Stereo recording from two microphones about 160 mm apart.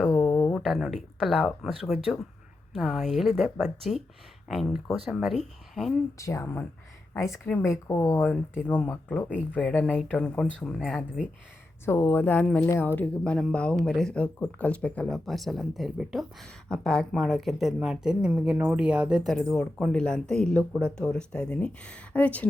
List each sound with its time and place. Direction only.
0.0 s a sound: 5° left (ahead or behind)
0.5 s speech: centre (ahead or behind)
2.7 s speech: centre (ahead or behind)
6.1 s speech: 20° left (ahead or behind); by 11.3 s centre (ahead or behind)
11.9 s speech: 15° left (ahead or behind)